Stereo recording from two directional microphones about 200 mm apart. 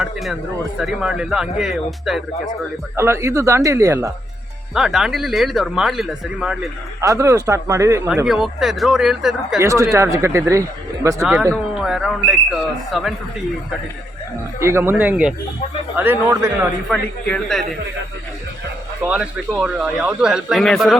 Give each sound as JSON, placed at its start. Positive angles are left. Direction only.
{"t": 0.8, "sound": "speech", "side_deg": 0}
{"t": 2.9, "sound": "speech", "side_deg": -15}
{"t": 4.7, "sound": "speech", "side_deg": 0}
{"t": 7.0, "sound": "speech", "side_deg": -15}
{"t": 9.6, "sound": "speech", "side_deg": -15}
{"t": 11.2, "sound": "speech", "side_deg": 0}
{"t": 14.6, "sound": "speech", "side_deg": -10}
{"t": 16.9, "sound": "speech", "side_deg": 5}
{"t": 19.0, "sound": "speech", "side_deg": -5}